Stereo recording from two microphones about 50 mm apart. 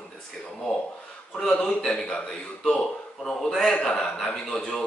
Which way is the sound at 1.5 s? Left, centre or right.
Centre.